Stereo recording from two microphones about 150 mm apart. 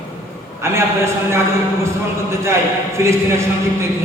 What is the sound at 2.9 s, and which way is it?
Speech, 20° right (ahead or behind).